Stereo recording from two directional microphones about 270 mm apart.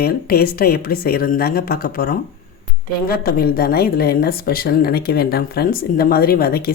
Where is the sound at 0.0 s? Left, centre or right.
Left.